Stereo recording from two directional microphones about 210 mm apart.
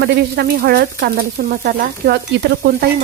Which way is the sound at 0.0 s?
50° right (ahead or behind).